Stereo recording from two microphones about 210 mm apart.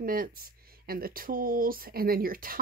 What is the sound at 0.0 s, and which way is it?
Speech, 45° right (ahead or behind).